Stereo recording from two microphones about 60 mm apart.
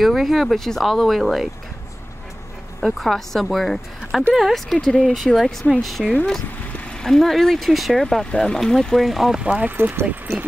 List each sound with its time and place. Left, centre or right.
0.0 s speech: centre
2.8 s speech: centre
4.7 s speech: centre
9.6 s speech: right